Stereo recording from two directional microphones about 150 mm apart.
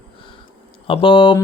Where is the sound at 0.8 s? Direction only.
35° left (ahead or behind).